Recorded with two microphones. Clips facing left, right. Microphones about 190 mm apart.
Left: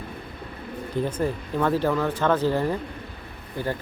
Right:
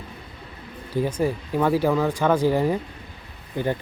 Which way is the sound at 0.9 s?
10° right (ahead or behind).